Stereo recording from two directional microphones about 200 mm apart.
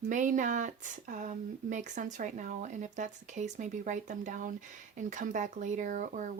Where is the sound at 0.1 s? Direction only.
40° right (ahead or behind).